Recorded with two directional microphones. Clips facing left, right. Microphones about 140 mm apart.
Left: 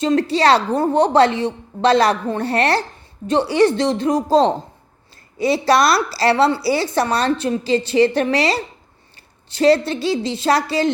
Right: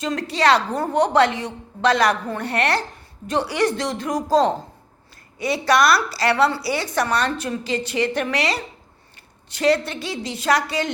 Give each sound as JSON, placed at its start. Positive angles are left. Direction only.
{"t": 0.0, "sound": "a woman's voice", "side_deg": 30}